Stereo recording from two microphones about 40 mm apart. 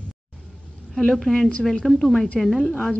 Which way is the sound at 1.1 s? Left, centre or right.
Centre.